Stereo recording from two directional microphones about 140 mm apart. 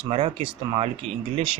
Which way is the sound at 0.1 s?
40° right (ahead or behind).